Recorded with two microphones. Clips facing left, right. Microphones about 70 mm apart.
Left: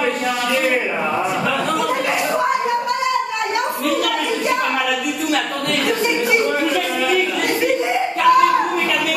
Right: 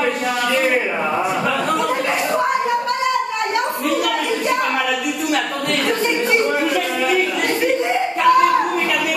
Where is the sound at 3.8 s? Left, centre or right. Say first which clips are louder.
Left 1 dB; centre.